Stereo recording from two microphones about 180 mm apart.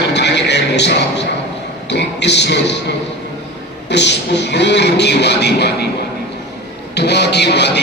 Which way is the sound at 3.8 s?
75° left (ahead or behind).